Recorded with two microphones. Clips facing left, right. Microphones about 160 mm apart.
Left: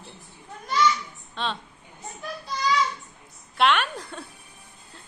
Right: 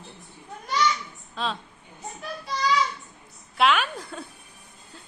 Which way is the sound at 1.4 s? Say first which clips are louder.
Even; centre (ahead or behind).